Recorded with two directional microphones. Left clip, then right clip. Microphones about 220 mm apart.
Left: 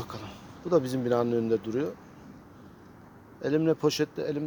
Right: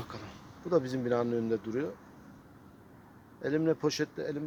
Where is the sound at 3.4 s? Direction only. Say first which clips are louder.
Left 4 dB; 5° left (ahead or behind).